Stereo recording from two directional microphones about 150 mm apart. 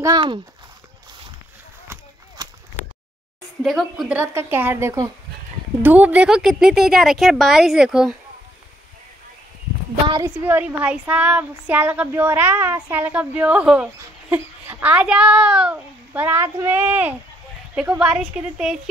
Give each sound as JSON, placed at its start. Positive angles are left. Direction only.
{"t": 0.0, "sound": "speech", "side_deg": -30}
{"t": 2.4, "sound": "a sound", "side_deg": -25}
{"t": 3.6, "sound": "a woman's voice", "side_deg": 0}
{"t": 4.2, "sound": "a woman's voice", "side_deg": -15}
{"t": 10.2, "sound": "a woman's voice", "side_deg": -15}